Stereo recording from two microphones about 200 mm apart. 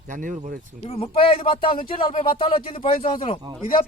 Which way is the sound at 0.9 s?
25° left (ahead or behind).